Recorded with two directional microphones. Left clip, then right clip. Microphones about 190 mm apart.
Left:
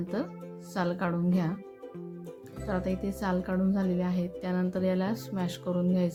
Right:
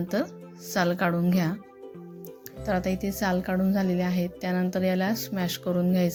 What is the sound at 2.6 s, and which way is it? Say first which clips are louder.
A woman's voice: right 5 dB; 10° right (ahead or behind).